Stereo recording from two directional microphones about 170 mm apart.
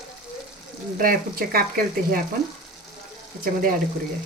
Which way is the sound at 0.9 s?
60° right (ahead or behind).